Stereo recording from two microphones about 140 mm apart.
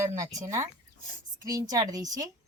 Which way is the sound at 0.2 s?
25° right (ahead or behind).